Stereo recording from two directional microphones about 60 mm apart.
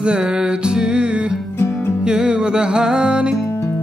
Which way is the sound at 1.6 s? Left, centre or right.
Left.